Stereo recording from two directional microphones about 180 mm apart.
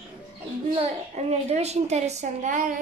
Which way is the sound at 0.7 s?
35° right (ahead or behind).